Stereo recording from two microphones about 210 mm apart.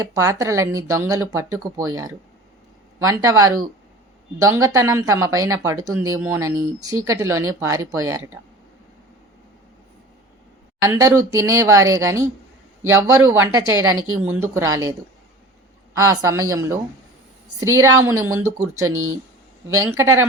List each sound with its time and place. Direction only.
0.0 s speech: 15° right (ahead or behind)
10.8 s speech: 15° right (ahead or behind)
13.8 s speech: 75° right (ahead or behind)
14.3 s speech: 10° right (ahead or behind)
16.0 s speech: 15° right (ahead or behind)
18.9 s speech: 80° right
19.7 s speech: 15° right (ahead or behind)